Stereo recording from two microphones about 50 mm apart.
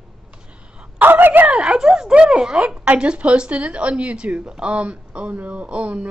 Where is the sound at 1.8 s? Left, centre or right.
Centre.